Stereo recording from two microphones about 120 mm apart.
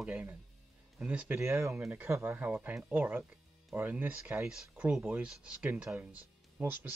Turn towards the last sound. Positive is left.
turn(degrees=-15)  # may be behind; listen again after turning